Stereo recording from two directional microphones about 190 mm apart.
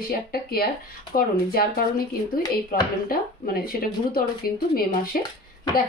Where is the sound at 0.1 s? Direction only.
50° left (ahead or behind).